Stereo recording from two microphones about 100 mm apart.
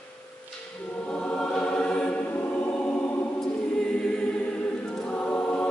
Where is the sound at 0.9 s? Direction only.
10° left (ahead or behind).